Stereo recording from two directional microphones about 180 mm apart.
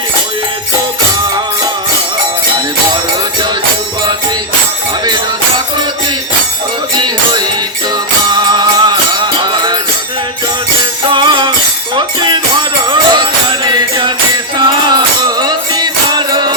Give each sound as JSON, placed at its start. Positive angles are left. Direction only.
{"t": 6.9, "sound": "music", "side_deg": -25}
{"t": 11.1, "sound": "music", "side_deg": -25}
{"t": 14.6, "sound": "music", "side_deg": -25}